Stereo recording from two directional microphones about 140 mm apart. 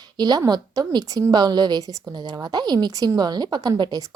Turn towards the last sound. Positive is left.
turn(degrees=-30)  # may be behind; listen again after turning